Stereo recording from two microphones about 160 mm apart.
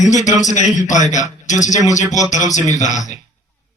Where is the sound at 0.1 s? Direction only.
50° left (ahead or behind).